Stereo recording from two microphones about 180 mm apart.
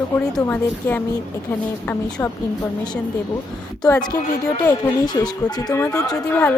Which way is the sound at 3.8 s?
20° left (ahead or behind).